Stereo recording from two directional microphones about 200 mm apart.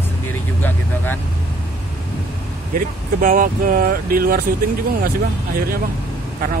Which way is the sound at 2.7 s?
45° right (ahead or behind).